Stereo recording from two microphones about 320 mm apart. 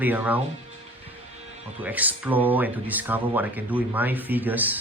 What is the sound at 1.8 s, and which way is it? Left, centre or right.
Speech, centre.